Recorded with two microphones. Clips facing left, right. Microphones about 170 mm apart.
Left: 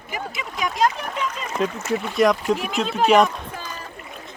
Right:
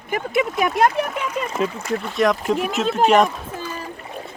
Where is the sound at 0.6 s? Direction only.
60° right (ahead or behind).